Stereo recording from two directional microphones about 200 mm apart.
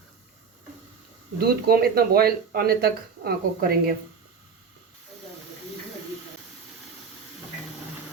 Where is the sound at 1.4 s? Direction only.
50° right (ahead or behind).